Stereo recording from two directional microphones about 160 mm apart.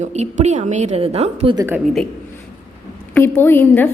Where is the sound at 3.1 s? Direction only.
15° left (ahead or behind).